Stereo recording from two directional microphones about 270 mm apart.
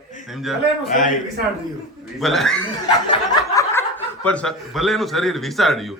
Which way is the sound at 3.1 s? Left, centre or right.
Centre.